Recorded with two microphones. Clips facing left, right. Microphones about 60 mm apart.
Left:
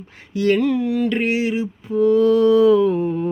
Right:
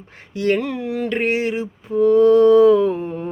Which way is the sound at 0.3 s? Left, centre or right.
Right.